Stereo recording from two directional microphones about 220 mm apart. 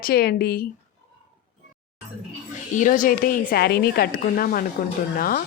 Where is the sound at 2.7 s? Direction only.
35° left (ahead or behind).